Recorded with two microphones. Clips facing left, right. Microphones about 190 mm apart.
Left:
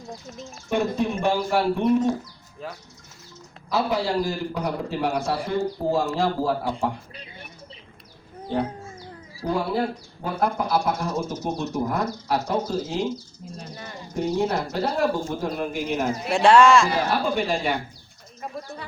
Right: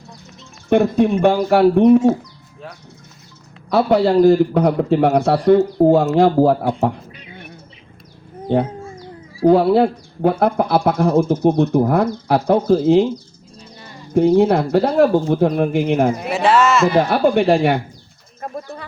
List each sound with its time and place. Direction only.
0.7 s speech: 60° right (ahead or behind)
3.7 s speech: 60° right (ahead or behind)
9.4 s speech: 60° right (ahead or behind)
13.6 s a sound: 55° left (ahead or behind)
14.1 s speech: 60° right (ahead or behind)
16.3 s speech: 5° right (ahead or behind)
16.9 s speech: 60° right (ahead or behind)